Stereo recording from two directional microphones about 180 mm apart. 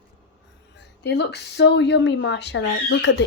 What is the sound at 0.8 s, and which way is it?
Speech, 70° left (ahead or behind).